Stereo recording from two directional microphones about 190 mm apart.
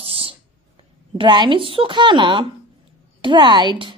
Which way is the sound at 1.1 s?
25° right (ahead or behind).